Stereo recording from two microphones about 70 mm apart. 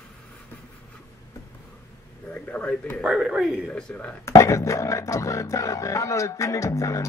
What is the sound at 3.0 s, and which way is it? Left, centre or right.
Speech, centre.